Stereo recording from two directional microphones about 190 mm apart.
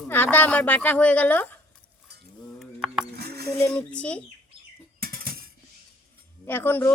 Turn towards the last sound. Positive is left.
turn(degrees=10)  # may be behind; listen again after turning